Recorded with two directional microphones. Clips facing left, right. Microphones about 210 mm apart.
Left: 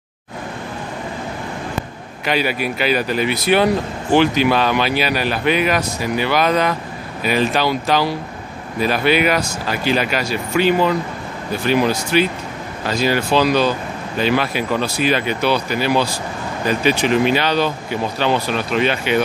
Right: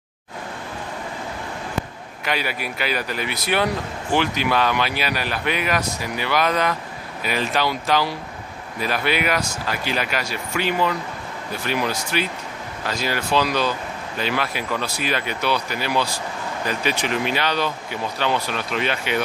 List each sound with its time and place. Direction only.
2.2 s speech: 30° left (ahead or behind)
11.6 s speech: 30° left (ahead or behind)